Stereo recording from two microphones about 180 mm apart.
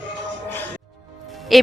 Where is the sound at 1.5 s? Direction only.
Centre (ahead or behind).